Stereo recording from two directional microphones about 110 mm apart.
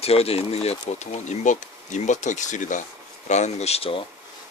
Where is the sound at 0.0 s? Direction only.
65° left (ahead or behind).